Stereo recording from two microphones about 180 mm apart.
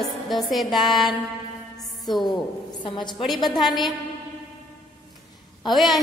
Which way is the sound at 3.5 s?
Centre (ahead or behind).